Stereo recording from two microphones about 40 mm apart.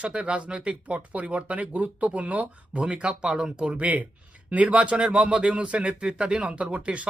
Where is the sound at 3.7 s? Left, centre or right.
Right.